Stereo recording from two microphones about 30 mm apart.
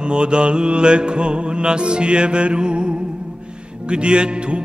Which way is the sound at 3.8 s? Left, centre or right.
Right.